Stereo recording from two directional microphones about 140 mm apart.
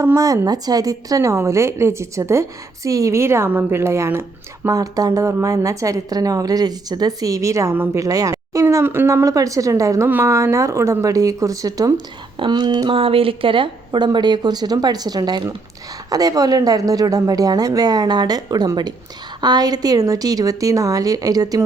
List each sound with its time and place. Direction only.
0.0 s a woman's voice: 25° right (ahead or behind)